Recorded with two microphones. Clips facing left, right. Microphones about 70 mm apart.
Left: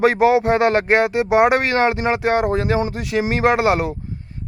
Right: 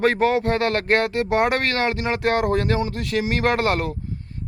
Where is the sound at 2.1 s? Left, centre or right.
Centre.